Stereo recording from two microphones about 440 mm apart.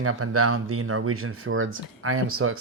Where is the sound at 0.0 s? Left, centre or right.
Right.